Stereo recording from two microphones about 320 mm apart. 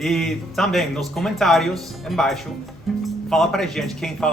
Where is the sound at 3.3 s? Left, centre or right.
Centre.